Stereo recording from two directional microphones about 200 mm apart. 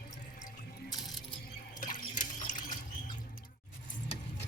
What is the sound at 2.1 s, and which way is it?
Water, 40° left (ahead or behind).